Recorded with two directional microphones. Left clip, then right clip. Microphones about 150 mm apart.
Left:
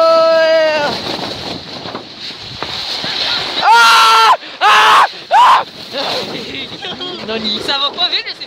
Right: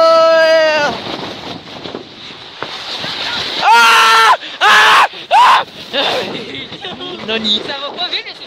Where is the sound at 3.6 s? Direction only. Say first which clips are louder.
Even; 10° right (ahead or behind).